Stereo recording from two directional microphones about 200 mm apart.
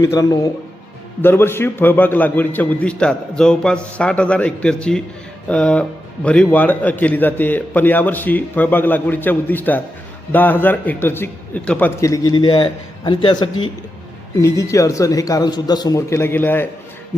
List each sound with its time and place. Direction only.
0.0 s a man's voice: 15° left (ahead or behind)